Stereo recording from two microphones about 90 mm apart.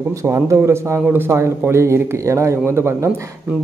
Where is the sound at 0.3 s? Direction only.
30° right (ahead or behind).